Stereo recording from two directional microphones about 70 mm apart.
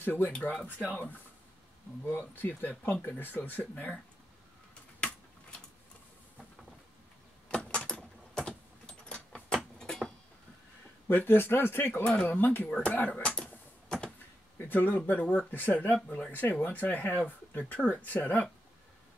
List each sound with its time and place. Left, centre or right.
0.0 s speech: left
7.5 s keys jangling: centre
11.1 s a man's voice: left; by 13.5 s centre
14.7 s speech: left